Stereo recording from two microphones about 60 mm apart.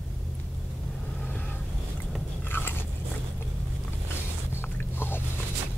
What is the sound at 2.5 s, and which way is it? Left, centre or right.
Biting, left.